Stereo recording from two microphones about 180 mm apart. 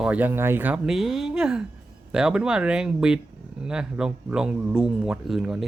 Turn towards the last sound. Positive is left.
turn(degrees=0)  # may be behind; listen again after turning